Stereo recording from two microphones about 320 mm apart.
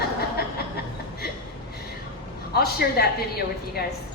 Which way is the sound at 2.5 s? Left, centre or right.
Left.